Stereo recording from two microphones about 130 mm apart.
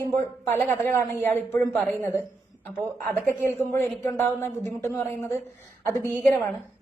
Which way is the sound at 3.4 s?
20° left (ahead or behind).